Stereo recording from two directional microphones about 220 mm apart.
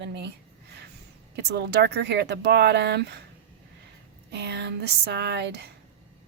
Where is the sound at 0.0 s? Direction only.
50° right (ahead or behind).